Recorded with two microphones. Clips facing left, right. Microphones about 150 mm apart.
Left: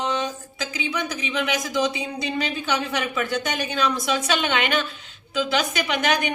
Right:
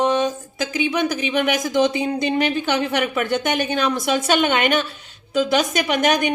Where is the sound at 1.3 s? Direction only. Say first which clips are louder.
Right 5 dB; 55° right (ahead or behind).